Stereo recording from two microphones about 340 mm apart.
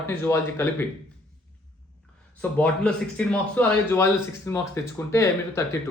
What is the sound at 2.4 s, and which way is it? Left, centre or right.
Speech, centre.